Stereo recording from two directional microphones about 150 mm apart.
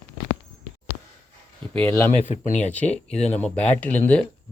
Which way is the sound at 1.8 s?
15° left (ahead or behind).